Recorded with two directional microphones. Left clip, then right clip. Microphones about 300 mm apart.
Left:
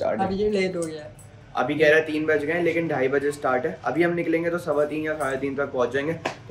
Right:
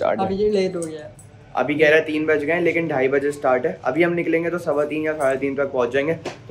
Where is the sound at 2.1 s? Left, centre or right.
Centre.